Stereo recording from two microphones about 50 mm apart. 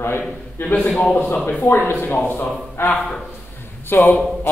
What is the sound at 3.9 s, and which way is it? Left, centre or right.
Speech, left.